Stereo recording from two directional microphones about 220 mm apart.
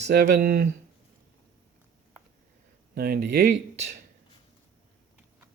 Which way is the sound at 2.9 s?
45° right (ahead or behind).